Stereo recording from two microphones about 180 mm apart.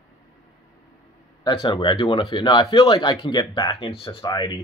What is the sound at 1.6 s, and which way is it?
Speech, 25° left (ahead or behind).